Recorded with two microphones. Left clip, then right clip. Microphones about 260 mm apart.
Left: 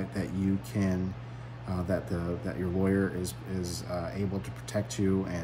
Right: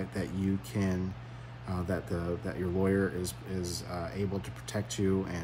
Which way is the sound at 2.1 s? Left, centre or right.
Centre.